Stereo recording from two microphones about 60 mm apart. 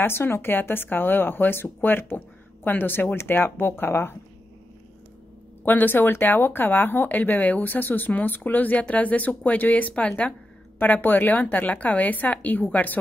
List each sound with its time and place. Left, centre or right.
0.0 s speech: left
5.7 s speech: left